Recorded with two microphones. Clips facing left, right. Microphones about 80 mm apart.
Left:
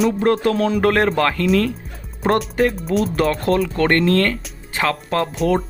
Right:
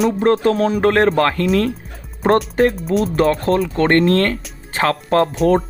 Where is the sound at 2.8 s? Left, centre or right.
Centre.